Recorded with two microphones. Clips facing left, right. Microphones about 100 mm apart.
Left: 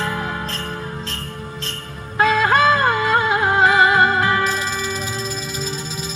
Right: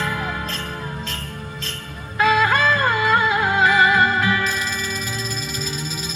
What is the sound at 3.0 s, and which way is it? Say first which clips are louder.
Music: left 1 dB; 40° left (ahead or behind).